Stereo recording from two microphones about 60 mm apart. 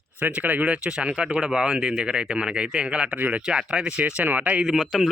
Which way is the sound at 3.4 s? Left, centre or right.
Centre.